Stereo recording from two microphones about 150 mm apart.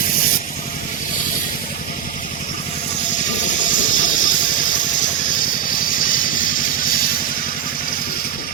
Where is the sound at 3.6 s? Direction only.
60° left (ahead or behind).